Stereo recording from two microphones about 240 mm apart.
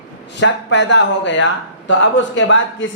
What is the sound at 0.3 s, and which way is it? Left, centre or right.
A man's voice, left.